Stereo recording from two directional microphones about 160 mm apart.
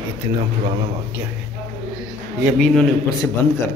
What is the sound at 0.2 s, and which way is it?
Speech, 25° right (ahead or behind).